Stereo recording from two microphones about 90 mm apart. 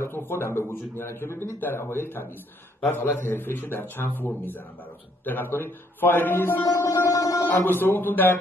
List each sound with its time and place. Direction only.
0.0 s speech: 25° left (ahead or behind)
5.2 s speech: 20° left (ahead or behind)
6.8 s music: 35° left (ahead or behind)
7.4 s speech: 25° left (ahead or behind)